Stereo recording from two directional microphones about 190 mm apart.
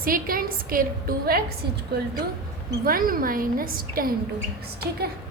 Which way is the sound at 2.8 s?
50° right (ahead or behind).